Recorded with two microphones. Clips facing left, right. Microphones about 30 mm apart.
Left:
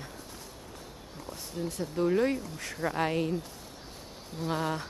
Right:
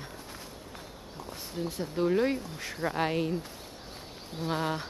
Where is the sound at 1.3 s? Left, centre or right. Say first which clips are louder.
Even; right.